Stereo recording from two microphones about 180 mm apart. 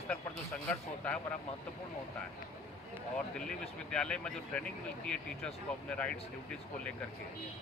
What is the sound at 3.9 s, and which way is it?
Speech, 5° left (ahead or behind).